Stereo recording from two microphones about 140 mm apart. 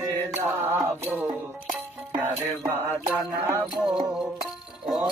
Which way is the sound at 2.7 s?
15° right (ahead or behind).